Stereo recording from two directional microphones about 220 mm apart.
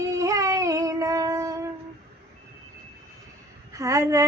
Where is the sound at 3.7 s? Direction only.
15° right (ahead or behind).